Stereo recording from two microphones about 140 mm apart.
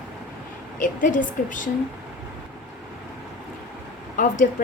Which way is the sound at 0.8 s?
70° left (ahead or behind).